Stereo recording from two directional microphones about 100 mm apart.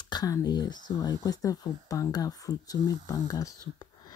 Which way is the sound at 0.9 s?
35° left (ahead or behind).